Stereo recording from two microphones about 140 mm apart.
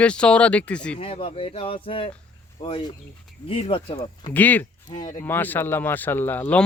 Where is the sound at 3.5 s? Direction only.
40° left (ahead or behind).